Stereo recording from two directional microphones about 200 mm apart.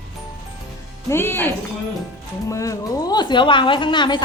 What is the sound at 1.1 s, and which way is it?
A woman's voice, 10° left (ahead or behind).